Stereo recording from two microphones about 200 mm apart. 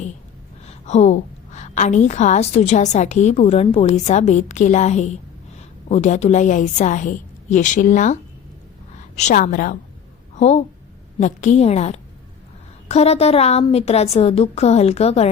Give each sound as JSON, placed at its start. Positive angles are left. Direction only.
{"t": 0.6, "sound": "a woman's voice", "side_deg": 35}